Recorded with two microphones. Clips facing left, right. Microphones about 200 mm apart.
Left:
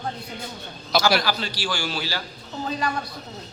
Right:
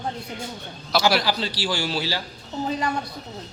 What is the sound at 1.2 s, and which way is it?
A man's voice, 30° right (ahead or behind).